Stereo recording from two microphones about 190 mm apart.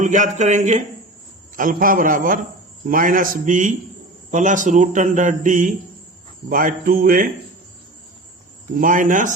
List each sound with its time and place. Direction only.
0.0 s a man's voice: 40° right (ahead or behind)
8.7 s a man's voice: 45° right (ahead or behind)